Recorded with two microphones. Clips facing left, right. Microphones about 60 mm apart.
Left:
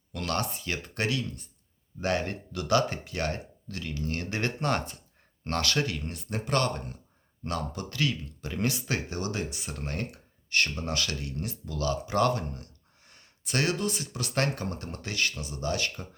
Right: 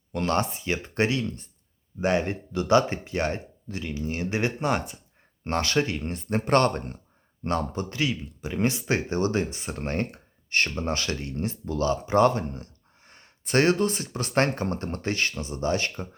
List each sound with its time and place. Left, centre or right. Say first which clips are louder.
0.1 s speech: right 6 dB; right